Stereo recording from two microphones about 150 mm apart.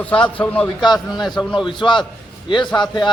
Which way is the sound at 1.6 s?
30° left (ahead or behind).